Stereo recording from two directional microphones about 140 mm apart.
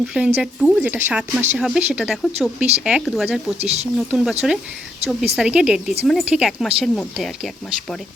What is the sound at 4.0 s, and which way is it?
Speech, 5° right (ahead or behind).